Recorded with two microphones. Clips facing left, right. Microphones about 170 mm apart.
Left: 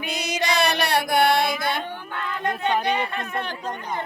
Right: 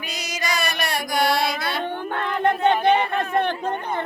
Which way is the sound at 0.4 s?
65° left (ahead or behind).